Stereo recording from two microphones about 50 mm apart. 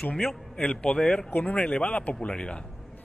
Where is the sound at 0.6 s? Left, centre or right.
Left.